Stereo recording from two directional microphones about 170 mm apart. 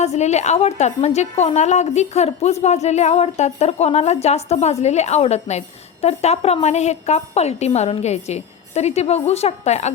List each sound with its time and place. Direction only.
0.0 s a woman's voice: 40° left (ahead or behind)